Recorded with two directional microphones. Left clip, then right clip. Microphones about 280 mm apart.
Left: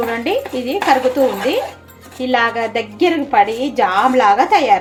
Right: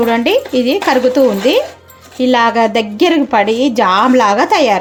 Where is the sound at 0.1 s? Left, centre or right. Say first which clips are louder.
Right 6 dB; right.